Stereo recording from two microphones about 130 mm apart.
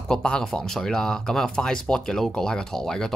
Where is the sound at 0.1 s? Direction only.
5° left (ahead or behind).